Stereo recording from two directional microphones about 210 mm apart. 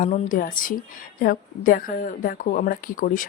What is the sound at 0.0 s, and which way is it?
Speech, 40° left (ahead or behind).